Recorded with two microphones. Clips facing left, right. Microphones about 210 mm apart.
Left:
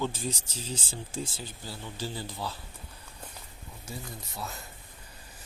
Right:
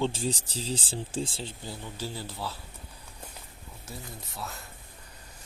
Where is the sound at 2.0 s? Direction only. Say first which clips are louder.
Left 1 dB; 5° right (ahead or behind).